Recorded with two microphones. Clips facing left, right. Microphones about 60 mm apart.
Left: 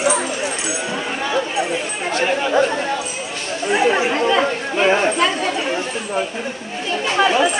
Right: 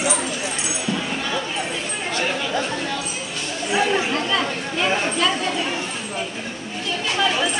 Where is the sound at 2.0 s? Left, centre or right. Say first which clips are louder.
Left 6 dB; left.